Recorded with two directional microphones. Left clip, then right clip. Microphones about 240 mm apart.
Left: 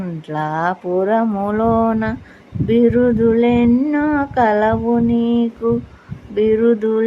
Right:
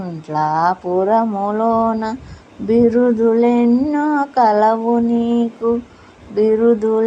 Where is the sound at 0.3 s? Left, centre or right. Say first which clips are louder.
Right 4 dB; centre.